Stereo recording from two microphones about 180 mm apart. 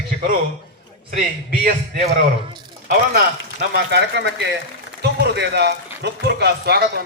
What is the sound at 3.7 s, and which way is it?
Speech, 65° right (ahead or behind).